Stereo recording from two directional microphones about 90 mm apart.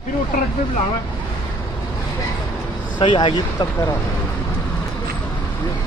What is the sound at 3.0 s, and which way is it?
Speech, 65° left (ahead or behind).